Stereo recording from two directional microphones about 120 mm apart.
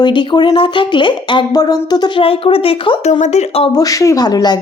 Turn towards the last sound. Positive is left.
turn(degrees=35)  # may be behind; listen again after turning